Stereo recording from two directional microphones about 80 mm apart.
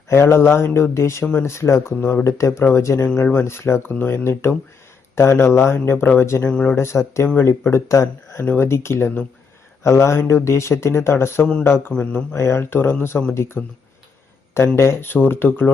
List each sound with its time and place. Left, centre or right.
0.1 s speech: left
14.8 s speech: left